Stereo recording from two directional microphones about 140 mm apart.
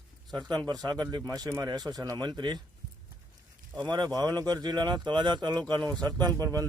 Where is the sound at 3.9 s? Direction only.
30° right (ahead or behind).